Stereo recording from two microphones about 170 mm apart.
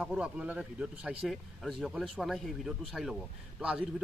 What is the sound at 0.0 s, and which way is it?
A man's voice, 5° right (ahead or behind).